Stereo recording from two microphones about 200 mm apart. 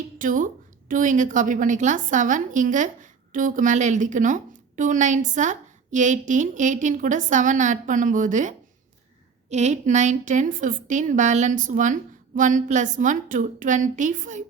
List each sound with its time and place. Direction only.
0.2 s a woman's voice: 40° right (ahead or behind)